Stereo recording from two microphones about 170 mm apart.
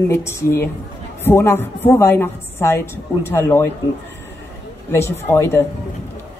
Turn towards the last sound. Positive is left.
turn(degrees=15)  # may be behind; listen again after turning